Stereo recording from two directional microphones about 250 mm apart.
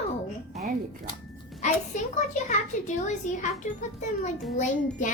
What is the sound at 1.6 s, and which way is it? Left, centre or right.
A child's voice, left.